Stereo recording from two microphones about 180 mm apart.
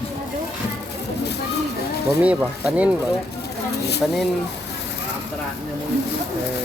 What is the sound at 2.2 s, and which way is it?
Speech, 10° right (ahead or behind).